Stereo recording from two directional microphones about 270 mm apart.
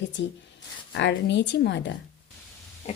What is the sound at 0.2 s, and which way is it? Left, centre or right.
Speech, left.